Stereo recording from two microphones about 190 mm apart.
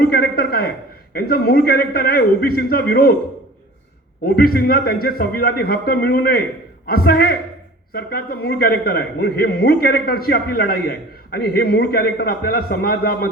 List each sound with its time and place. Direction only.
0.0 s a sound: 55° left (ahead or behind)
1.1 s a man's voice: 50° left (ahead or behind)
4.2 s a man's voice: 55° left (ahead or behind)